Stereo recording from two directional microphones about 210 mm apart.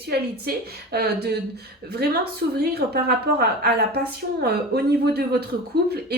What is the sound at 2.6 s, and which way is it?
Speech, 50° right (ahead or behind).